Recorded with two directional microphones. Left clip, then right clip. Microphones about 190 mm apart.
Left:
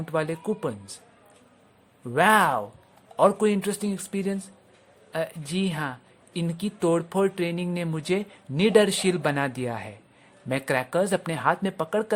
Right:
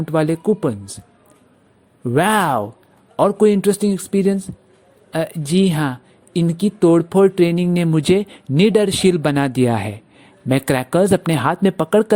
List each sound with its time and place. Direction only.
0.0 s speech: 30° right (ahead or behind)
2.0 s speech: 35° right (ahead or behind)